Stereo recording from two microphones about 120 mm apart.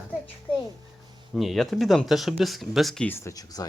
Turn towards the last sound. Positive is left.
turn(degrees=30)  # may be behind; listen again after turning